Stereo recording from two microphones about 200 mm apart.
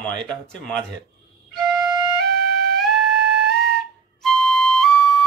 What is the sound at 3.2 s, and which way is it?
Music, 55° right (ahead or behind).